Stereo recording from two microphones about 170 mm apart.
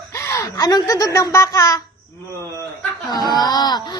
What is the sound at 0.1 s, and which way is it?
Speech, 15° left (ahead or behind).